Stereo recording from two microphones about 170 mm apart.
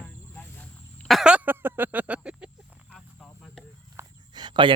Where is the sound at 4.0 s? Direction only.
25° right (ahead or behind).